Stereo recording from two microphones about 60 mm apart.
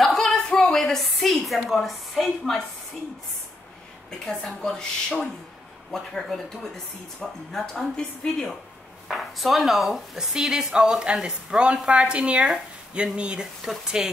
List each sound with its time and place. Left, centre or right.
0.0 s a sound: centre
1.7 s speech: centre
4.3 s speech: centre
5.9 s speech: centre